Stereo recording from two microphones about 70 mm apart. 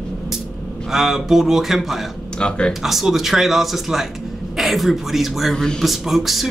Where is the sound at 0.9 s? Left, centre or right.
Centre.